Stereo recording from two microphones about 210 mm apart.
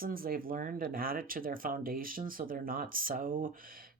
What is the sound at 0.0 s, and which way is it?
Speech, 45° right (ahead or behind).